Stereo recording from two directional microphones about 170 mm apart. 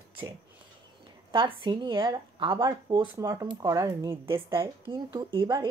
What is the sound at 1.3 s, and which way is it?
Speech, 30° right (ahead or behind).